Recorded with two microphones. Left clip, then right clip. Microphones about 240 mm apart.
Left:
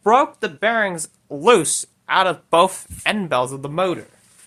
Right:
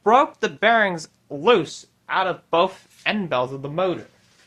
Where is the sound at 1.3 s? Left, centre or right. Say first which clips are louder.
Left 3 dB; left.